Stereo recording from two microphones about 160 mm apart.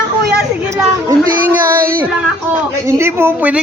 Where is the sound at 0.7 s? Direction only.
20° right (ahead or behind).